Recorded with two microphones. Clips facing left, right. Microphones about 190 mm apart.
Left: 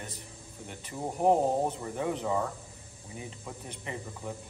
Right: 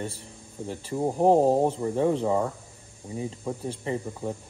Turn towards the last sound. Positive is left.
turn(degrees=-30)  # may be behind; listen again after turning